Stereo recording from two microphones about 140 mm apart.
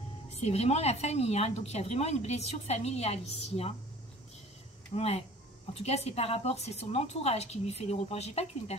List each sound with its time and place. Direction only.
0.3 s a woman's voice: 45° left (ahead or behind)
4.9 s a woman's voice: 45° left (ahead or behind)